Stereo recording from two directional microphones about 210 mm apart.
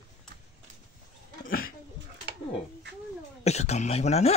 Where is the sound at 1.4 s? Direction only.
45° left (ahead or behind).